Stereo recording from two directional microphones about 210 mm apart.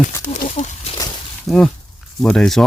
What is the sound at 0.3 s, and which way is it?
Speech, 35° left (ahead or behind).